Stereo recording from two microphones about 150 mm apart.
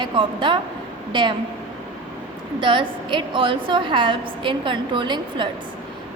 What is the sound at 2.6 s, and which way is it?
A woman's voice, 35° right (ahead or behind).